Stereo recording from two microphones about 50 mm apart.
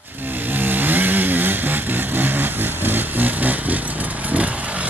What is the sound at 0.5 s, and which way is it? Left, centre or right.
Vehicle, right.